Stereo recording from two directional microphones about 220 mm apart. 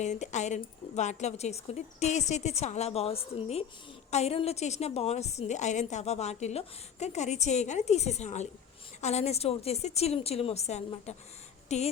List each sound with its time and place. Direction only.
0.0 s a woman's voice: 30° left (ahead or behind)